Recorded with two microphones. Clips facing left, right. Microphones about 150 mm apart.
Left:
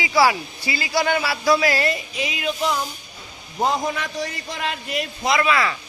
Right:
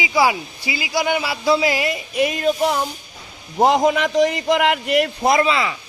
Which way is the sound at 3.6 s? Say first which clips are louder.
Right 7 dB; 85° right.